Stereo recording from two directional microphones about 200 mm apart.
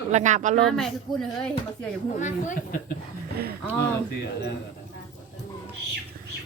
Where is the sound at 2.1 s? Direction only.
40° left (ahead or behind).